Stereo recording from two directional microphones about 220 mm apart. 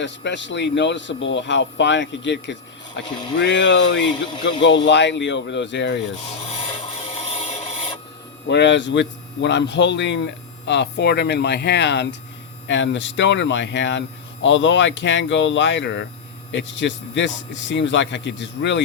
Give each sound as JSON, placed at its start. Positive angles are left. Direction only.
{"t": 0.0, "sound": "speech", "side_deg": 55}
{"t": 8.4, "sound": "speech", "side_deg": 55}